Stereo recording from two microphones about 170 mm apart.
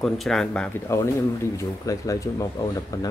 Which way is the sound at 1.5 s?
20° left (ahead or behind).